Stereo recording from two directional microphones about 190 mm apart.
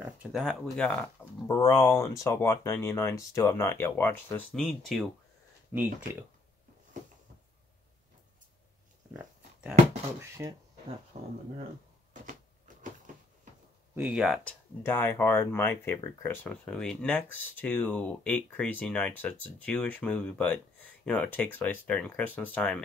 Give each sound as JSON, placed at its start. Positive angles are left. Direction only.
{"t": 0.3, "sound": "speech", "side_deg": 0}
{"t": 1.5, "sound": "speech", "side_deg": 15}
{"t": 4.6, "sound": "speech", "side_deg": 0}
{"t": 5.7, "sound": "speech", "side_deg": -10}
{"t": 9.1, "sound": "a sound", "side_deg": -5}
{"t": 10.4, "sound": "speech", "side_deg": -15}
{"t": 11.1, "sound": "speech", "side_deg": -35}
{"t": 13.9, "sound": "speech", "side_deg": -5}